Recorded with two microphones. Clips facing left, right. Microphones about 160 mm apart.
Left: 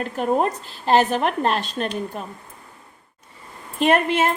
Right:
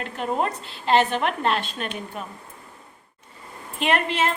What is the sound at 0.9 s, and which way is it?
A woman's voice, 40° left (ahead or behind).